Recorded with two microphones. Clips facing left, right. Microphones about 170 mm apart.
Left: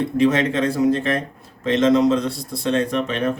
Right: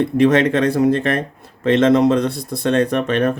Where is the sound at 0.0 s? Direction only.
60° right (ahead or behind).